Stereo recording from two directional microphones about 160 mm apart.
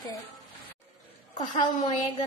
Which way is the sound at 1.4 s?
45° left (ahead or behind).